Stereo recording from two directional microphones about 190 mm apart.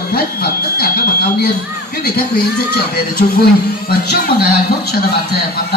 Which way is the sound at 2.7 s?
55° left (ahead or behind).